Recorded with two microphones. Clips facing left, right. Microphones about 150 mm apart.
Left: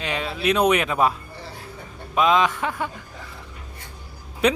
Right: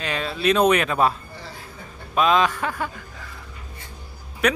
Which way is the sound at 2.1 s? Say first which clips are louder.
Even; 15° left (ahead or behind).